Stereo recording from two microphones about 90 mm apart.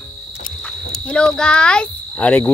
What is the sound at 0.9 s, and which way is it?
Speech, 10° left (ahead or behind).